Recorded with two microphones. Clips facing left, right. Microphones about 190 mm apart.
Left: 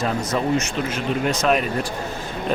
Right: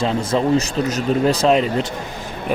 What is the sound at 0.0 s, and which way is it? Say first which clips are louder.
Speech: right 4 dB; 25° right (ahead or behind).